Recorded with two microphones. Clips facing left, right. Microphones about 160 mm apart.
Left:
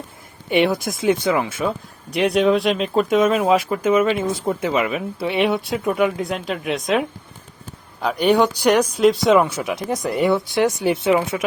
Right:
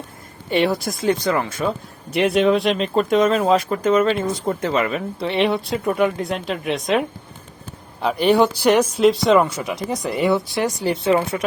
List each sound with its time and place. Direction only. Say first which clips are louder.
0.5 s speech: left 1 dB; centre (ahead or behind)
10.4 s speech: left 4 dB; 20° left (ahead or behind)
10.9 s speech: even; centre (ahead or behind)